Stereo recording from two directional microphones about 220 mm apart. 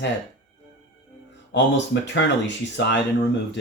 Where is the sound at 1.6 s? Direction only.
55° left (ahead or behind).